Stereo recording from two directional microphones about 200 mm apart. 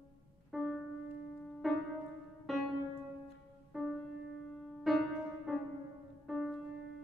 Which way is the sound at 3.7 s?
Centre (ahead or behind).